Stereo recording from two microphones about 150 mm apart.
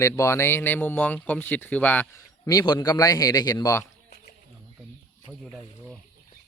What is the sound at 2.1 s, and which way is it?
A man's voice, 25° left (ahead or behind).